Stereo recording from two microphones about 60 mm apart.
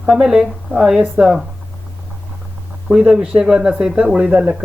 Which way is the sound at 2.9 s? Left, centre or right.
Centre.